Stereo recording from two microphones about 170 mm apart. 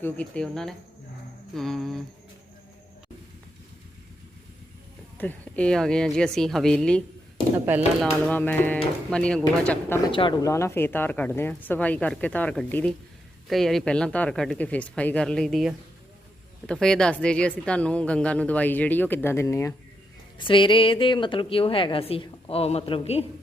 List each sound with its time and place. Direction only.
0.0 s speech: 5° left (ahead or behind)
5.1 s speech: 10° left (ahead or behind)
7.5 s speech: 10° right (ahead or behind)
8.3 s speech: 10° left (ahead or behind)
10.1 s speech: 30° left (ahead or behind)
10.4 s speech: 15° left (ahead or behind)
20.4 s a woman's voice: 30° left (ahead or behind)